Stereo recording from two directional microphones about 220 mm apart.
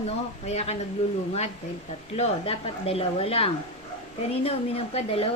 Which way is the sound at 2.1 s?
30° left (ahead or behind).